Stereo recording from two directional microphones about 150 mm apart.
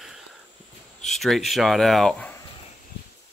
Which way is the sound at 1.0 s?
Centre (ahead or behind).